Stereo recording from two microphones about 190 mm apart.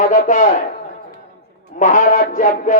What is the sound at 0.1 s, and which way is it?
Speech, 45° left (ahead or behind).